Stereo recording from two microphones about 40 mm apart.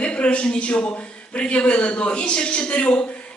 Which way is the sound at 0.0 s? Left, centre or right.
Left.